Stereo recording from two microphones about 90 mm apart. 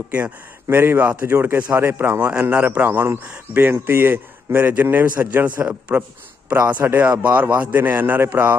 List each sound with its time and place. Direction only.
0.7 s a man's voice: 20° right (ahead or behind)